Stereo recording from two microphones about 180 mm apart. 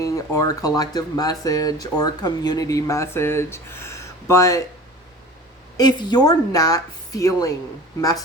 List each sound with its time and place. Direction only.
0.0 s speech: 20° left (ahead or behind)
5.7 s speech: 25° left (ahead or behind)